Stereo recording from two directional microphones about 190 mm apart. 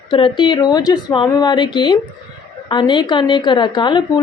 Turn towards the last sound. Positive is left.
turn(degrees=25)  # may be behind; listen again after turning